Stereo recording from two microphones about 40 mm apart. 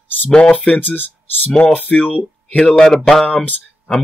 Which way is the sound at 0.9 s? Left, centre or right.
Left.